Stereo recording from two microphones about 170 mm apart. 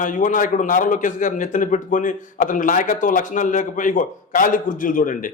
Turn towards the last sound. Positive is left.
turn(degrees=55)  # may be behind; listen again after turning